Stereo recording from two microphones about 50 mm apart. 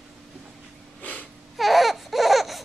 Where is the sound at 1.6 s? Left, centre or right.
Centre.